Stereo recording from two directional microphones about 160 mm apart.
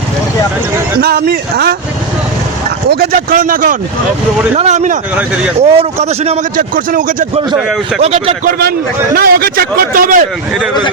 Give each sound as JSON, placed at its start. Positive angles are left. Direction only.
{"t": 1.0, "sound": "a man's voice", "side_deg": -80}
{"t": 2.9, "sound": "speech", "side_deg": -70}
{"t": 4.5, "sound": "a man's voice", "side_deg": -45}
{"t": 6.6, "sound": "speech", "side_deg": -60}
{"t": 8.4, "sound": "speech", "side_deg": -80}